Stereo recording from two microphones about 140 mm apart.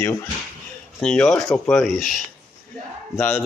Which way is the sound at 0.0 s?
15° left (ahead or behind).